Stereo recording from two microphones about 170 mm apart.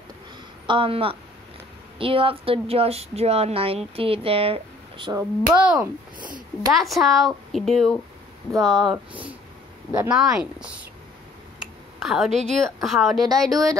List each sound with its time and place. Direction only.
0.7 s a woman's voice: 30° right (ahead or behind)
5.5 s speech: 5° right (ahead or behind)
8.9 s speech: 10° right (ahead or behind)